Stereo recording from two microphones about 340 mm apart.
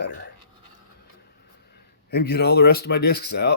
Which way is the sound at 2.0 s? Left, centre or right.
Left.